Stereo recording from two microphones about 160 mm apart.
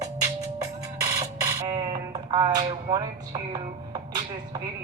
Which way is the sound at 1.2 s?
25° right (ahead or behind).